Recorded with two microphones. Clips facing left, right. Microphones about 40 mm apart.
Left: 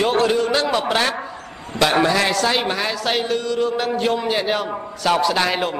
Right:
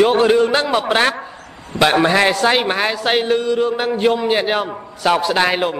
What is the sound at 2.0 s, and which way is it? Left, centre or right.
A man's voice, right.